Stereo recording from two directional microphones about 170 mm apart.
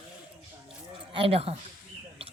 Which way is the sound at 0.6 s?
30° right (ahead or behind).